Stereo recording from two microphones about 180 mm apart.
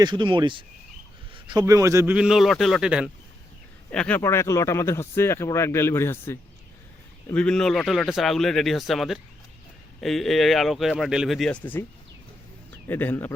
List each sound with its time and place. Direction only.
0.0 s a man's voice: 25° right (ahead or behind)
2.1 s speech: 5° right (ahead or behind)
3.9 s speech: 10° left (ahead or behind)
12.9 s speech: 10° left (ahead or behind)